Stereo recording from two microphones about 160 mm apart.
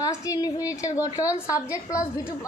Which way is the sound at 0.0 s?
20° left (ahead or behind).